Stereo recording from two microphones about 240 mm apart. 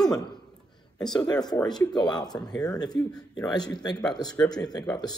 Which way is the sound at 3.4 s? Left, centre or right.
Centre.